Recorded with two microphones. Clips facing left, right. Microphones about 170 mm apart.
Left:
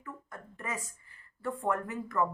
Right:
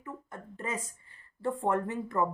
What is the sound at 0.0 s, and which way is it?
A woman's voice, 25° right (ahead or behind).